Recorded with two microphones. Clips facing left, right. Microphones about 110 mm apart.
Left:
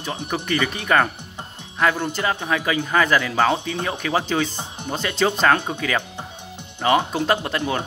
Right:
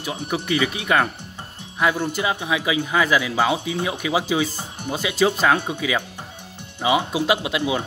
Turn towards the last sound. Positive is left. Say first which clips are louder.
# right 1 dB
turn(degrees=-10)  # may be behind; listen again after turning